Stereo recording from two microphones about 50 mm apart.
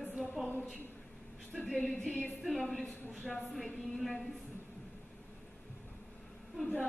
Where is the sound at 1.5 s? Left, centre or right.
Centre.